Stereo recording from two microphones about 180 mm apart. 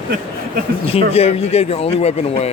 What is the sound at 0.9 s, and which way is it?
A man's voice, 35° left (ahead or behind).